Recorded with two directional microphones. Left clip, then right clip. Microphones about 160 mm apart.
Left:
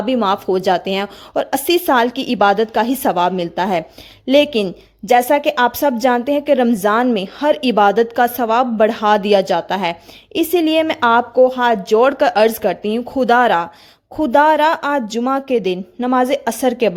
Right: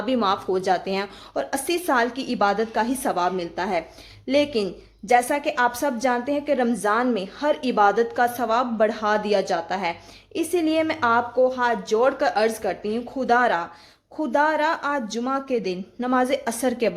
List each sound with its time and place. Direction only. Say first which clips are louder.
0.0 s a woman's voice: left 6 dB; 40° left (ahead or behind)